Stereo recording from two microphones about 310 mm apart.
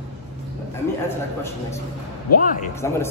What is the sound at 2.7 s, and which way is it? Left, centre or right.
Speech, centre.